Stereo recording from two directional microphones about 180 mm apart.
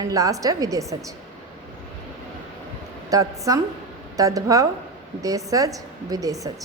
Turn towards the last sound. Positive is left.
turn(degrees=-20)  # may be behind; listen again after turning